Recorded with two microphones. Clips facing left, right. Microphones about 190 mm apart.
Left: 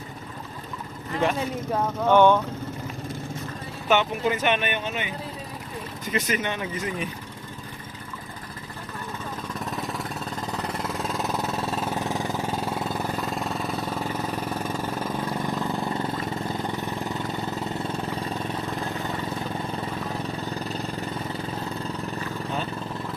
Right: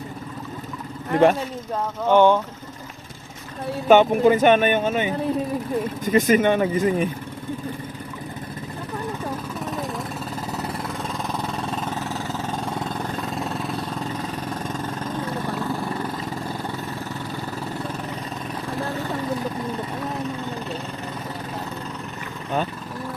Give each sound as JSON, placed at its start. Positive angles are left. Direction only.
{"t": 1.1, "sound": "speech", "side_deg": -55}
{"t": 2.0, "sound": "speech", "side_deg": -15}
{"t": 3.8, "sound": "speech", "side_deg": -45}
{"t": 10.6, "sound": "vehicle", "side_deg": 0}
{"t": 15.6, "sound": "vehicle", "side_deg": 25}